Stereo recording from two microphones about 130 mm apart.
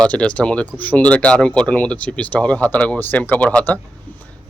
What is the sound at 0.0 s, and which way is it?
Speech, 10° left (ahead or behind).